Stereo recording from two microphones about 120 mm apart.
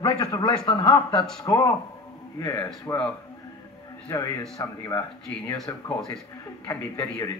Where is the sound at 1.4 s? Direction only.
30° left (ahead or behind).